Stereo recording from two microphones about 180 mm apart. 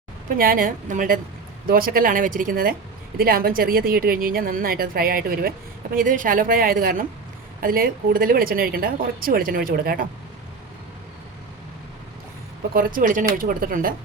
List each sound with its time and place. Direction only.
0.3 s a woman's voice: 55° right (ahead or behind)
12.7 s a woman's voice: 50° right (ahead or behind)